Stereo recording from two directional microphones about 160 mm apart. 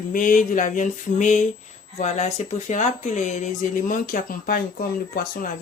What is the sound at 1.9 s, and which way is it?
Speech, 45° left (ahead or behind).